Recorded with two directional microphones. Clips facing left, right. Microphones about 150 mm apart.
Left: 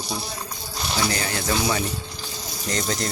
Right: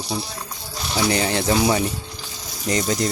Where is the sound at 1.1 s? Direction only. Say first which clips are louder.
Right 6 dB; 20° right (ahead or behind).